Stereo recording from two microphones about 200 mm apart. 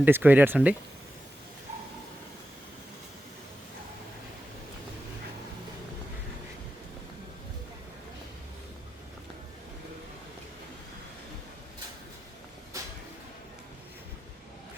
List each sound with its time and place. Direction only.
0.0 s speech: 10° right (ahead or behind)
12.7 s vehicle: 15° right (ahead or behind)